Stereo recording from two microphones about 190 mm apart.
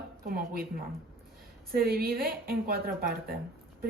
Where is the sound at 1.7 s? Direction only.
50° right (ahead or behind).